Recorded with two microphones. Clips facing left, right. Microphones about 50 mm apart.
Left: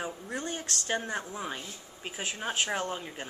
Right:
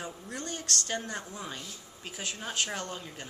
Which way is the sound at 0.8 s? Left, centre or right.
Centre.